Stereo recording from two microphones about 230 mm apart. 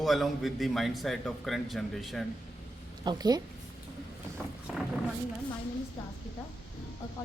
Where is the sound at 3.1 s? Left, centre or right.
Centre.